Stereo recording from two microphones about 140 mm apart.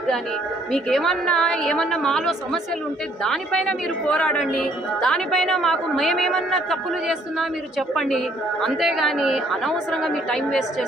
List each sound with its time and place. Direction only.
0.7 s a man's voice: centre (ahead or behind)